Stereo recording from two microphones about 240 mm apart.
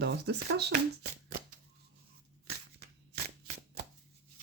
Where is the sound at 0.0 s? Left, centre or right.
Right.